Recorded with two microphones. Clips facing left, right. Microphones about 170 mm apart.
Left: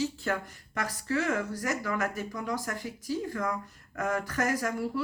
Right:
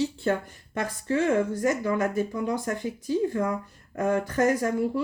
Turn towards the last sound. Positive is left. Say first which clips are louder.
# right 5 dB
turn(degrees=-25)  # may be behind; listen again after turning